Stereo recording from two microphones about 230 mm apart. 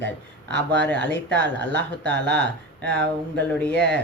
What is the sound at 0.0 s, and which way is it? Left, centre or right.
Speech, right.